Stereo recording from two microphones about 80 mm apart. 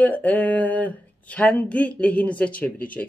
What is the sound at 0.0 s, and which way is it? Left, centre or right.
Speech, centre.